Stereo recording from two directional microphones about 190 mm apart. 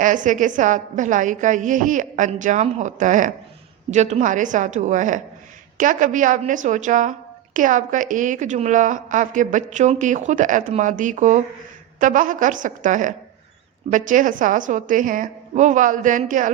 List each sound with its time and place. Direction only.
0.0 s a woman's voice: 45° right (ahead or behind)